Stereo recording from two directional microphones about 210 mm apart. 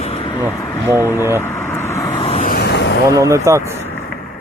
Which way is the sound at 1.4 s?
10° left (ahead or behind).